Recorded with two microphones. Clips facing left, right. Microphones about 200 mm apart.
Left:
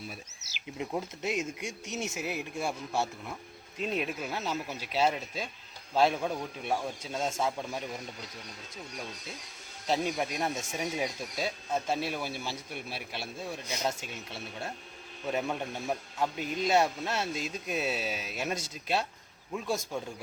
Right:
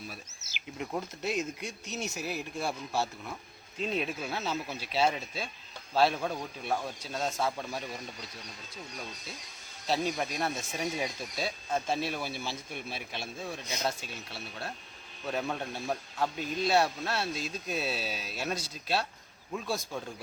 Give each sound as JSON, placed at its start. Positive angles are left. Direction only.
{"t": 0.4, "sound": "speech", "side_deg": 65}
{"t": 0.8, "sound": "speech", "side_deg": 15}
{"t": 1.4, "sound": "speech", "side_deg": 90}
{"t": 2.1, "sound": "speech", "side_deg": 20}
{"t": 3.8, "sound": "speech", "side_deg": 5}
{"t": 9.8, "sound": "a man's voice", "side_deg": 20}
{"t": 15.3, "sound": "speech", "side_deg": 10}